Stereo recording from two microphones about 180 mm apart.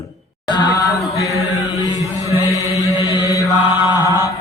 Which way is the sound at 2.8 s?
15° right (ahead or behind).